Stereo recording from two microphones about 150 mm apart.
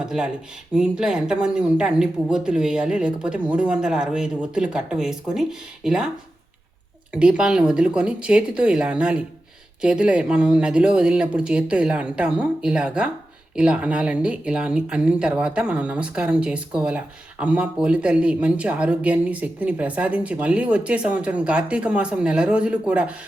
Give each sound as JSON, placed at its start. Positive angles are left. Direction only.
{"t": 0.0, "sound": "speech", "side_deg": -5}
{"t": 7.1, "sound": "speech", "side_deg": -5}